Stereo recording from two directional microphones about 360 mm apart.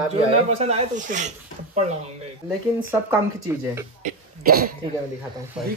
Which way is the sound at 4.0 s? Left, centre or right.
Right.